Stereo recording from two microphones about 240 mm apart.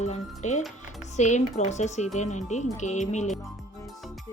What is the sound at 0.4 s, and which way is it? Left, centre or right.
Speech, left.